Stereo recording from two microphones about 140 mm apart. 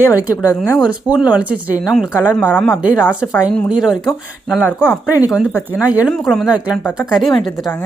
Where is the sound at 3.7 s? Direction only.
5° right (ahead or behind).